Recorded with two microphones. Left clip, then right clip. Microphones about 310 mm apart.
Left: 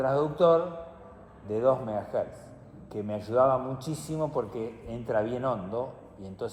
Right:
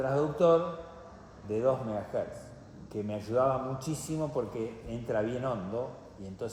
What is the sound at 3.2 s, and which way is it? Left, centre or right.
A man's voice, centre.